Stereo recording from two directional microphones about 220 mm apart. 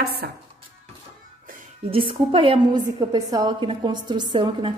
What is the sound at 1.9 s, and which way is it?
A woman's voice, 25° right (ahead or behind).